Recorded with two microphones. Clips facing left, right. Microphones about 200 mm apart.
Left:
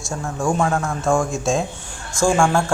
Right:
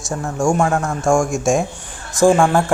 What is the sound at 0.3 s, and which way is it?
Speech, 10° right (ahead or behind).